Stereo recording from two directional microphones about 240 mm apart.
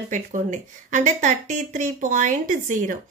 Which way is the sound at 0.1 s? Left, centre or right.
Right.